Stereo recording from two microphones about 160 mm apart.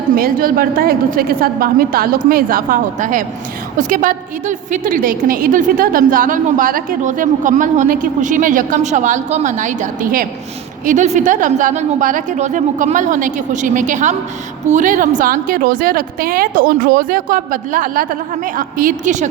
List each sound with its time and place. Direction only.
0.2 s a woman's voice: 65° right (ahead or behind)